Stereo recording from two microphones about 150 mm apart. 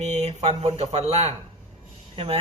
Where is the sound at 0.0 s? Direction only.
45° right (ahead or behind).